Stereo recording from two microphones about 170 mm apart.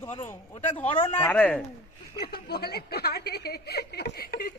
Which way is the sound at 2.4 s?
70° left (ahead or behind).